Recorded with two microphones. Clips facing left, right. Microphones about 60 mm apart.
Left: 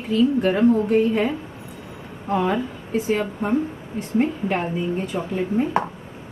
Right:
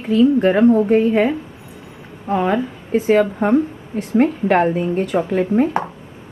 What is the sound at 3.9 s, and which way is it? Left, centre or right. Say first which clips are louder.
Speech: right 6 dB; right.